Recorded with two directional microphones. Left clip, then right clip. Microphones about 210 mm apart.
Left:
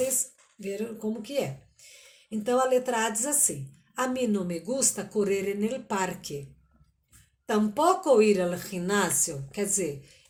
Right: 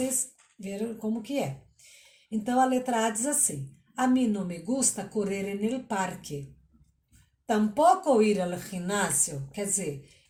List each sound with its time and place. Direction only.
1.2 s speech: 55° left (ahead or behind)
7.4 s speech: 55° left (ahead or behind)